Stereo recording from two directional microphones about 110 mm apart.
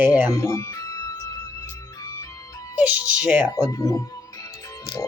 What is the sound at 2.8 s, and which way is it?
Speech, 15° right (ahead or behind).